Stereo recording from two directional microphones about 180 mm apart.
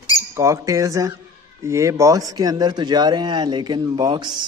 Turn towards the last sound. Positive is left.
turn(degrees=-25)  # may be behind; listen again after turning